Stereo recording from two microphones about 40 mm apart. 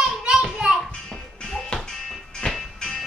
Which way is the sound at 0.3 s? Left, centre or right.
Right.